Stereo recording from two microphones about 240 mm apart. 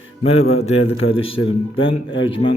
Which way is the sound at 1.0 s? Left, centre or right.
Left.